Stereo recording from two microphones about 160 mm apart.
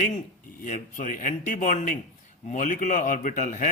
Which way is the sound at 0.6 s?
55° left (ahead or behind).